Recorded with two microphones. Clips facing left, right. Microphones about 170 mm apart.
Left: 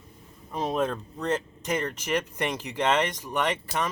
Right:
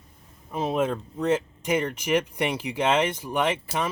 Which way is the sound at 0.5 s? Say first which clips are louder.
Right 2 dB; 5° right (ahead or behind).